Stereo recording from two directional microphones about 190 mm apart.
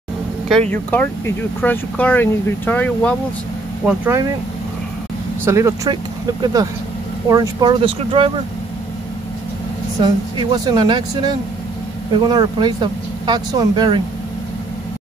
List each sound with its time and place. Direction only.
0.5 s speech: 5° left (ahead or behind)
3.8 s speech: 10° right (ahead or behind)
5.4 s speech: 15° right (ahead or behind)
10.0 s speech: 20° right (ahead or behind)